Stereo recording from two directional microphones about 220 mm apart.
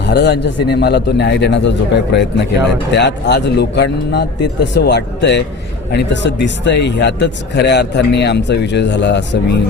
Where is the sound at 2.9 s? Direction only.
50° left (ahead or behind).